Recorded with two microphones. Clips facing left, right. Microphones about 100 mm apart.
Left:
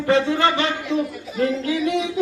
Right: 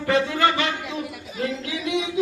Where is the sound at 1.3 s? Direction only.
45° left (ahead or behind).